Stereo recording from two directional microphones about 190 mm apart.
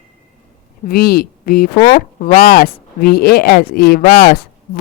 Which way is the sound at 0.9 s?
55° left (ahead or behind).